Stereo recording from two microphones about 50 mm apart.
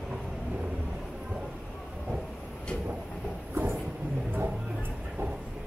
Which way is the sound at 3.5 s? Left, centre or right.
Right.